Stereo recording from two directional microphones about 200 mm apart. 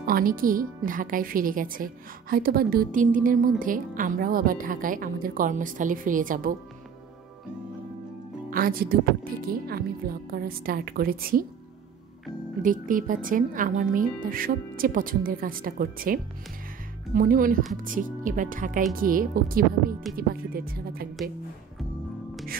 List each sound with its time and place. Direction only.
0.0 s a woman's voice: 45° right (ahead or behind)
8.5 s a woman's voice: 45° right (ahead or behind)
12.6 s a woman's voice: 40° right (ahead or behind)